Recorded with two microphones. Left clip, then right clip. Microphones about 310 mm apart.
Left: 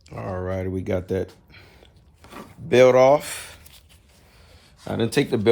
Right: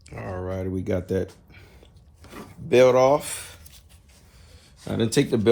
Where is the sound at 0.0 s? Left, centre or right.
Centre.